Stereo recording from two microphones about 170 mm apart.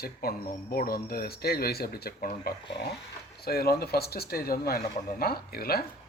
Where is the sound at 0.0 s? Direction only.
60° left (ahead or behind).